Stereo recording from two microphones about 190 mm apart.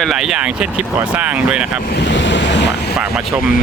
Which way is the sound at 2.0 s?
70° left (ahead or behind).